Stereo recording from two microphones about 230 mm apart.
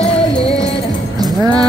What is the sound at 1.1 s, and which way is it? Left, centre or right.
Music, centre.